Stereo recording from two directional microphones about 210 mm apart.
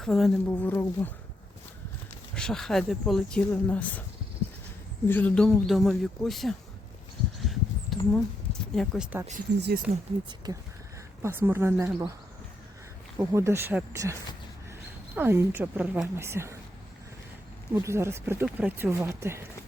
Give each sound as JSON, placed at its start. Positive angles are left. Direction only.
{"t": 0.0, "sound": "speech", "side_deg": 0}
{"t": 2.3, "sound": "speech", "side_deg": 5}
{"t": 5.0, "sound": "speech", "side_deg": 10}
{"t": 7.4, "sound": "a sound", "side_deg": 0}
{"t": 8.7, "sound": "speech", "side_deg": 0}
{"t": 9.6, "sound": "speech", "side_deg": -50}
{"t": 10.2, "sound": "speech", "side_deg": -20}
{"t": 13.1, "sound": "speech", "side_deg": -15}
{"t": 17.7, "sound": "speech", "side_deg": -10}